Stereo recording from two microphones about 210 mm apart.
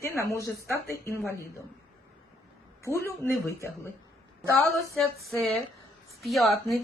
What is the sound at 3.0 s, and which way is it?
Speech, 10° left (ahead or behind).